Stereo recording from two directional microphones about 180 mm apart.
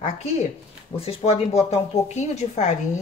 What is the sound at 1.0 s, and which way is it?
Speech, 35° left (ahead or behind).